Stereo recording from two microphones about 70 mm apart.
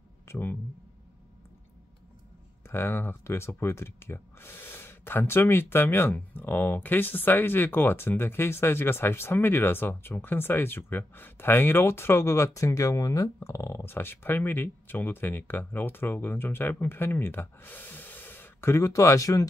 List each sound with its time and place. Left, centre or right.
0.3 s speech: left
2.6 s speech: left